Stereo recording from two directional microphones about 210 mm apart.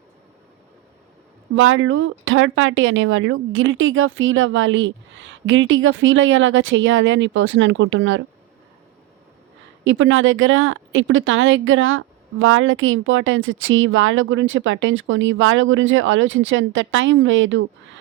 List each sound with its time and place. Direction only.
1.5 s speech: 70° right (ahead or behind)
9.8 s speech: 60° right (ahead or behind)